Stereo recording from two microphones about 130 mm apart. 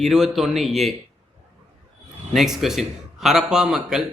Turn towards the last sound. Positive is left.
turn(degrees=-5)  # may be behind; listen again after turning